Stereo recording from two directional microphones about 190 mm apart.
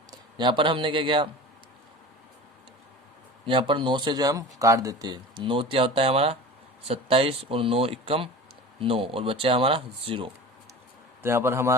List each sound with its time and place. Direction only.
0.1 s a man's voice: 25° right (ahead or behind)
3.4 s speech: 25° right (ahead or behind)
11.2 s a man's voice: 15° right (ahead or behind)